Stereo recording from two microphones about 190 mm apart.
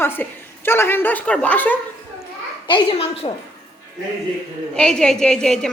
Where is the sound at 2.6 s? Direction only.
25° left (ahead or behind).